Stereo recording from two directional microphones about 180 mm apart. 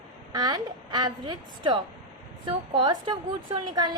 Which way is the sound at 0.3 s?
20° right (ahead or behind).